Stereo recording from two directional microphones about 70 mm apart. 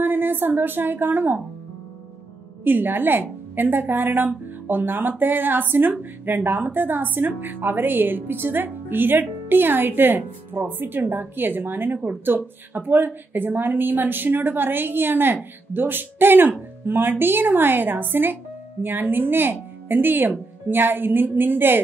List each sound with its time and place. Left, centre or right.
0.0 s a woman's voice: right
2.6 s a woman's voice: right